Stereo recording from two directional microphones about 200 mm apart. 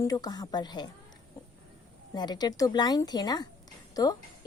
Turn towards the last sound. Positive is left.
turn(degrees=20)  # may be behind; listen again after turning